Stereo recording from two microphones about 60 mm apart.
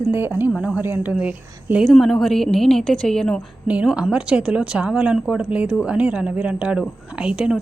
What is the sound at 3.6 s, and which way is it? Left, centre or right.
A woman's voice, right.